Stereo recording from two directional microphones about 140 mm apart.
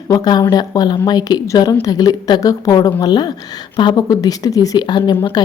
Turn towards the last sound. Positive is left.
turn(degrees=30)  # may be behind; listen again after turning